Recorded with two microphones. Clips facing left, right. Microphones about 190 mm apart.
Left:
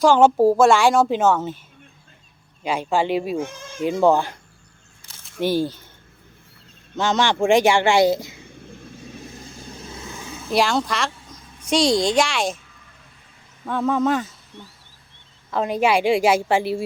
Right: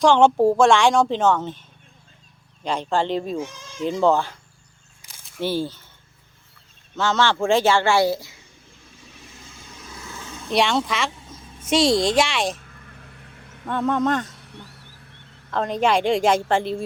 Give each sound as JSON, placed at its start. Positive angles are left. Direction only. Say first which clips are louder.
{"t": 0.0, "sound": "a woman's voice", "louder": "left 1 dB", "side_deg": 5}
{"t": 2.6, "sound": "speech", "louder": "left 2 dB", "side_deg": 10}
{"t": 3.3, "sound": "speech", "louder": "left 2 dB", "side_deg": 55}
{"t": 4.0, "sound": "speech", "louder": "left 2 dB", "side_deg": 15}
{"t": 5.0, "sound": "single-lens reflex camera", "louder": "left 1 dB", "side_deg": -10}
{"t": 5.4, "sound": "speech", "louder": "left 3 dB", "side_deg": 15}
{"t": 6.9, "sound": "speech", "louder": "left 1 dB", "side_deg": 15}
{"t": 9.4, "sound": "vehicle", "louder": "left 6 dB", "side_deg": 35}
{"t": 13.7, "sound": "a woman's voice", "louder": "left 1 dB", "side_deg": 0}
{"t": 15.4, "sound": "speech", "louder": "left 1 dB", "side_deg": 10}